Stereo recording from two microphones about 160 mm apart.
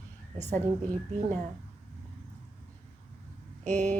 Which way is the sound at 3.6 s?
45° right (ahead or behind).